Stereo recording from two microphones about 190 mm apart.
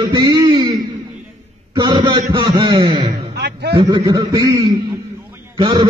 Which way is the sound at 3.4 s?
55° right (ahead or behind).